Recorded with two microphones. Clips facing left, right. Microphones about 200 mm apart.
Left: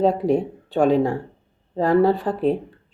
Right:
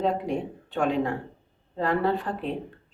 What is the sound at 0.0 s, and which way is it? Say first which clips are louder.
Speech: left 8 dB; 35° left (ahead or behind).